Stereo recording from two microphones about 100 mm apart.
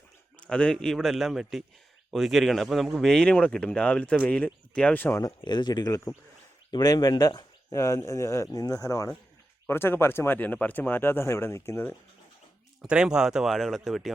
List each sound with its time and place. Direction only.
0.3 s a man's voice: 10° left (ahead or behind)
5.4 s speech: 50° left (ahead or behind)
9.6 s speech: 25° left (ahead or behind)
12.8 s speech: 10° right (ahead or behind)